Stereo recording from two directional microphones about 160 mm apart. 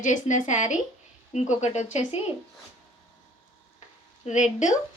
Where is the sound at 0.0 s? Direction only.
50° left (ahead or behind).